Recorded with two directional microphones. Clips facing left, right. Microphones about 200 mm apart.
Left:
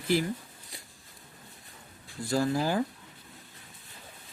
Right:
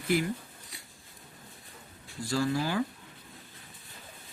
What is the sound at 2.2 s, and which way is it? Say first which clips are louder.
Speech: left 2 dB; 50° left (ahead or behind).